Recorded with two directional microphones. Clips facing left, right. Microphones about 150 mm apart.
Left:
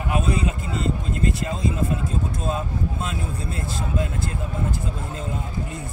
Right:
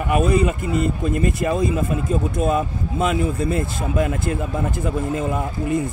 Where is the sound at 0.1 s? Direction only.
65° right (ahead or behind); by 4.4 s 90° right.